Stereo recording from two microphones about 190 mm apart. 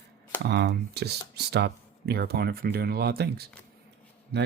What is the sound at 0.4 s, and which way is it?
Speech, 60° right (ahead or behind).